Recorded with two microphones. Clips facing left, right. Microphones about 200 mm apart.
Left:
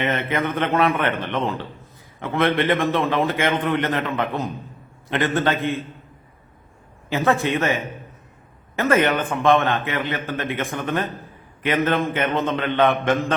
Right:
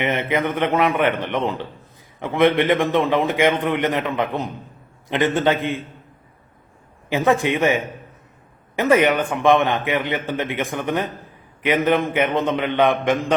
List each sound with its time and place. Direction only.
0.0 s a man's voice: 15° right (ahead or behind)
7.1 s a man's voice: 15° right (ahead or behind)